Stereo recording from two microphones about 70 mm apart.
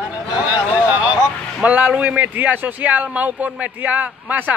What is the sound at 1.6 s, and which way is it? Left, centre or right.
Speech, right.